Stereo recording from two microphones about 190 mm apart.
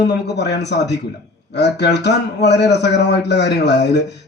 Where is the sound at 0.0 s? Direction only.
65° left (ahead or behind).